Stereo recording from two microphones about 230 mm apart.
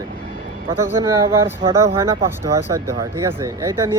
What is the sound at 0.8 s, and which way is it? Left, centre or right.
Speech, centre.